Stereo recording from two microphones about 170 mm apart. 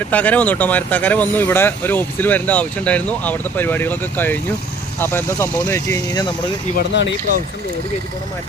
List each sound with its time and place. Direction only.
0.1 s speech: 10° left (ahead or behind)
6.7 s speech: 90° left